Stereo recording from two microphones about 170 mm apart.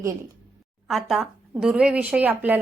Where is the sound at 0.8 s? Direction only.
Centre (ahead or behind).